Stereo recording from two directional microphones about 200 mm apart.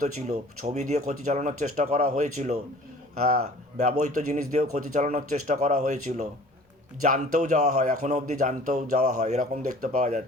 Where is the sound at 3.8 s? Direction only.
40° right (ahead or behind).